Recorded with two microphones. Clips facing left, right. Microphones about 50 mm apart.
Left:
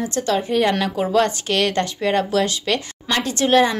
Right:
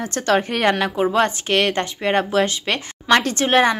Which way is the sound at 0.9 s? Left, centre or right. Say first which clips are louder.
Even; right.